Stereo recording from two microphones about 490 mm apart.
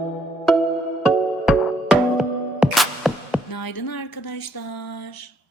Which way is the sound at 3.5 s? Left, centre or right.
Left.